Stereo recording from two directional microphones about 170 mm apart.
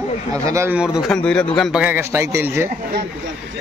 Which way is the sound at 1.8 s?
15° right (ahead or behind).